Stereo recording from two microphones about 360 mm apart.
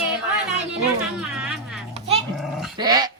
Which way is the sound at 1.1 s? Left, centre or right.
Centre.